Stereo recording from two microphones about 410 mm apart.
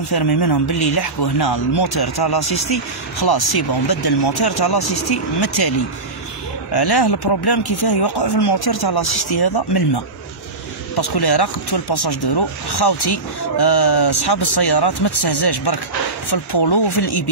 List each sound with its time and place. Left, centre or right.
0.1 s speech: left
11.0 s speech: left